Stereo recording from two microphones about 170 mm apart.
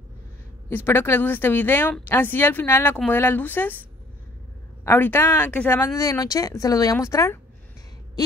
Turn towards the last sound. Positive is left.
turn(degrees=15)  # may be behind; listen again after turning